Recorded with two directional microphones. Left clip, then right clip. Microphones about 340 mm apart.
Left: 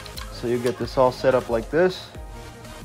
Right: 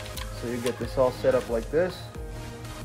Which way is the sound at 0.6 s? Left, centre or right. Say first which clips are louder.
Left 4 dB; left.